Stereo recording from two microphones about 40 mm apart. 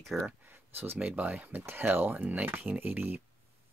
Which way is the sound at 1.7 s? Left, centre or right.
Right.